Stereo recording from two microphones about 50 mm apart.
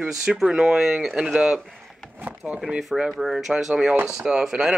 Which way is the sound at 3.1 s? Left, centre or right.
Centre.